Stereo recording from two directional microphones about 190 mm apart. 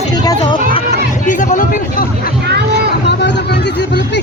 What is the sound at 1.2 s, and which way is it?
Hubbub, 45° left (ahead or behind).